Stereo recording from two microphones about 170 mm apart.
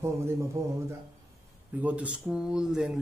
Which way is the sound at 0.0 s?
15° right (ahead or behind).